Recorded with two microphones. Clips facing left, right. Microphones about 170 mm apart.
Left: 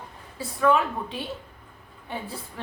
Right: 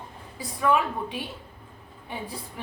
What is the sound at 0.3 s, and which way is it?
A woman's voice, 15° right (ahead or behind).